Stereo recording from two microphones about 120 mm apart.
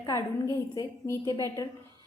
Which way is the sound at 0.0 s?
30° left (ahead or behind).